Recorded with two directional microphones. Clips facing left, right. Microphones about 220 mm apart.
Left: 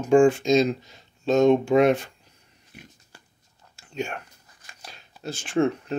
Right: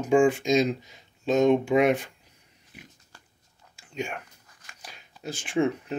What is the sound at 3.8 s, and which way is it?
Whispering, 15° right (ahead or behind).